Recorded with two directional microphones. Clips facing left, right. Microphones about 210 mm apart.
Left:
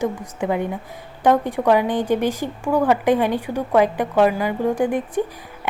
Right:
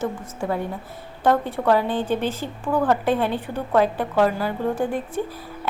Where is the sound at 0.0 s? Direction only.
15° left (ahead or behind).